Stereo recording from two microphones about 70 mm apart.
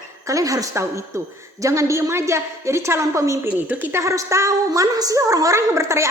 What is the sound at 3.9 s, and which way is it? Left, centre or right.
A woman's voice, right.